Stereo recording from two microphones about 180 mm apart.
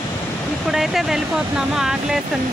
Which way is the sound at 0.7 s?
Centre (ahead or behind).